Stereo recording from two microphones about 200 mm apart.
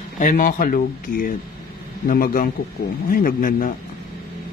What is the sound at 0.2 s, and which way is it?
Speech, 45° left (ahead or behind).